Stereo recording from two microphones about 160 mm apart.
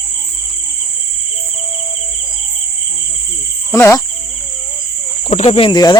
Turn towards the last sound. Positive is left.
turn(degrees=25)  # may be behind; listen again after turning